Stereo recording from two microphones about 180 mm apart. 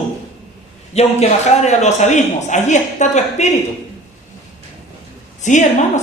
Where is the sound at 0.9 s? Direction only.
40° left (ahead or behind).